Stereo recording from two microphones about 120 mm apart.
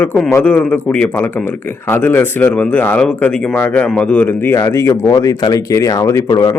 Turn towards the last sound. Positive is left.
turn(degrees=30)  # may be behind; listen again after turning